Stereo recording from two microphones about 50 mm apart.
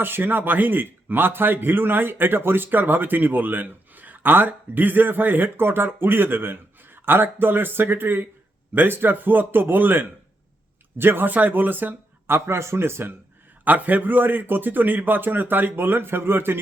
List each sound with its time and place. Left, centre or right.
0.0 s a man's voice: right
12.5 s speech: right
13.7 s a man's voice: right